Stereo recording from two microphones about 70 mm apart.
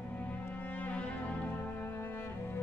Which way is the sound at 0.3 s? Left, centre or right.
Left.